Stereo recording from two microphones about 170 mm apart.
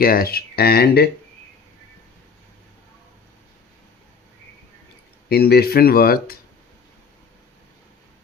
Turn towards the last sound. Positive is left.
turn(degrees=60)  # may be behind; listen again after turning